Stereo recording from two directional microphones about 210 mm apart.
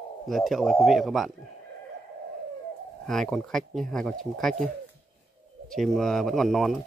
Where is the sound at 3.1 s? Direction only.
Centre (ahead or behind).